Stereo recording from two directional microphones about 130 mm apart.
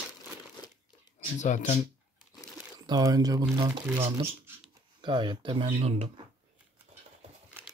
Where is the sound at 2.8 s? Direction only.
30° right (ahead or behind).